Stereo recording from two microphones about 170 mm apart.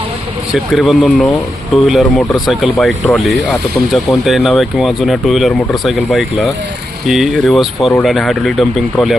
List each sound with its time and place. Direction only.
0.5 s speech: centre (ahead or behind)